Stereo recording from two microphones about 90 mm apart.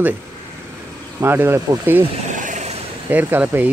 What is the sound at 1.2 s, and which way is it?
Speech, 25° right (ahead or behind).